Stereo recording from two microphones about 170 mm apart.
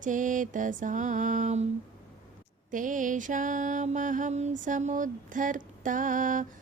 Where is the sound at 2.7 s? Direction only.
50° right (ahead or behind).